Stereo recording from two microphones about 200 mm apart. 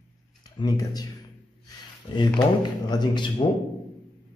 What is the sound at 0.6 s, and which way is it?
Speech, 20° left (ahead or behind).